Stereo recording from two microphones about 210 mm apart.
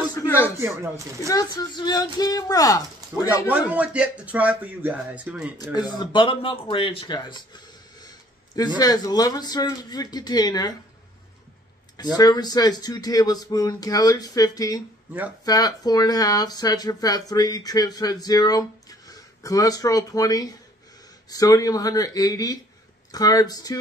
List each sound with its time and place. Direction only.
0.1 s a sound: 15° left (ahead or behind)
0.6 s speech: 15° right (ahead or behind)
1.2 s speech: 15° left (ahead or behind)
3.4 s speech: 5° right (ahead or behind)
5.6 s speech: 20° left (ahead or behind)
12.0 s speech: 20° left (ahead or behind)